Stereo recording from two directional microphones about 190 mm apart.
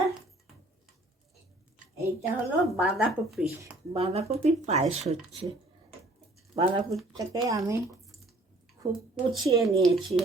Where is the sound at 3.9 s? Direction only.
30° right (ahead or behind).